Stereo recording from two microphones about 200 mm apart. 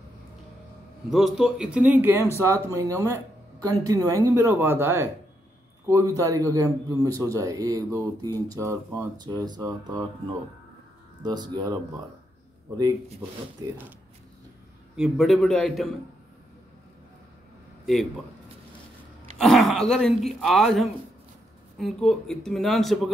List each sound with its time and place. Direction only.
1.1 s speech: centre (ahead or behind); by 10.0 s 20° right (ahead or behind)
11.2 s speech: 20° right (ahead or behind)
13.6 s speech: 10° right (ahead or behind)
15.0 s speech: centre (ahead or behind)
19.3 s speech: centre (ahead or behind)